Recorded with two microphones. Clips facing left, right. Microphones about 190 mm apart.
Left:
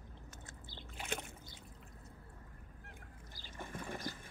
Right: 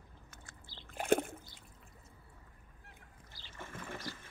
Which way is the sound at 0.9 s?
50° right (ahead or behind).